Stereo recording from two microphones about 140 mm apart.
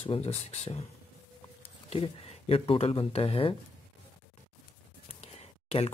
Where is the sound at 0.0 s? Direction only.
45° left (ahead or behind).